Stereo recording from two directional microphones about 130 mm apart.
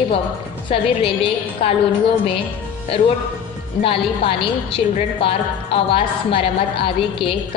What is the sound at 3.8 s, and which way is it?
A woman's voice, 45° left (ahead or behind).